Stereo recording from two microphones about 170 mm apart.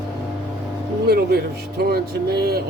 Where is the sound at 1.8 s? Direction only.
65° right (ahead or behind).